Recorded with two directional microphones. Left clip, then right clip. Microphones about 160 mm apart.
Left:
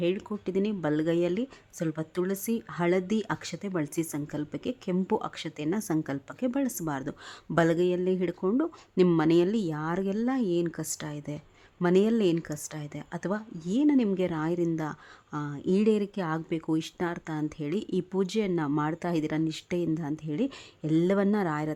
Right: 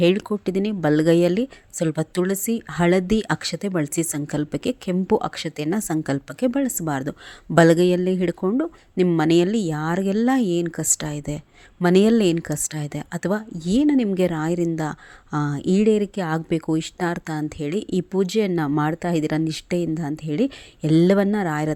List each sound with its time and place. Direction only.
0.0 s speech: 40° right (ahead or behind)
15.7 s speech: 20° right (ahead or behind)
21.2 s speech: 20° right (ahead or behind)